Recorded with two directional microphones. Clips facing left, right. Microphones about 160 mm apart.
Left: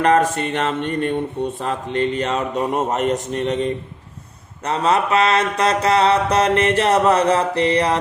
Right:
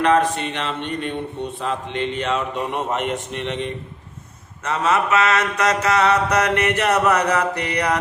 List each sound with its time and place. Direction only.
0.0 s speech: 45° left (ahead or behind)
1.5 s mantra: 40° left (ahead or behind)